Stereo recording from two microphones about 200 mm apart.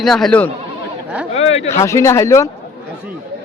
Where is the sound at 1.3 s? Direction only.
30° left (ahead or behind).